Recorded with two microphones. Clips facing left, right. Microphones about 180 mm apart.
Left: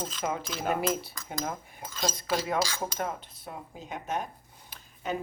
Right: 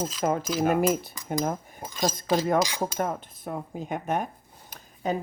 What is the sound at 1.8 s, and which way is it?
Speech, 15° right (ahead or behind).